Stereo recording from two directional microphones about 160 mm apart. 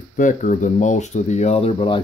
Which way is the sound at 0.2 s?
50° left (ahead or behind).